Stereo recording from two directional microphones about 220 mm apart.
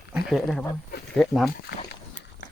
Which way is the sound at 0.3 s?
Centre (ahead or behind).